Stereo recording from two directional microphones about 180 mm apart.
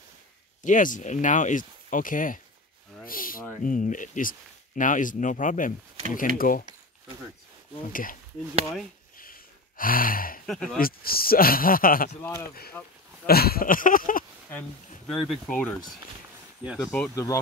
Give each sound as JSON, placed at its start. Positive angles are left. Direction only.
{"t": 0.6, "sound": "speech", "side_deg": 45}
{"t": 7.9, "sound": "speech", "side_deg": 50}
{"t": 9.1, "sound": "gasp", "side_deg": 50}
{"t": 10.4, "sound": "speech", "side_deg": 0}
{"t": 10.8, "sound": "speech", "side_deg": 55}
{"t": 12.2, "sound": "speech", "side_deg": 15}
{"t": 12.4, "sound": "speech", "side_deg": 60}
{"t": 15.0, "sound": "speech", "side_deg": 0}
{"t": 16.6, "sound": "speech", "side_deg": -5}
{"t": 17.1, "sound": "speech", "side_deg": 15}